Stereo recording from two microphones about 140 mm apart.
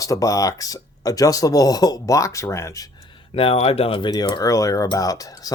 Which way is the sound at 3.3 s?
45° left (ahead or behind).